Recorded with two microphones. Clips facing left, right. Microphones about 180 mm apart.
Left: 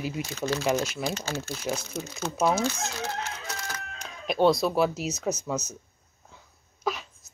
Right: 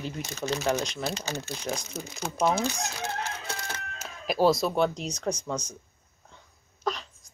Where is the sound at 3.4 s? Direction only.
30° right (ahead or behind).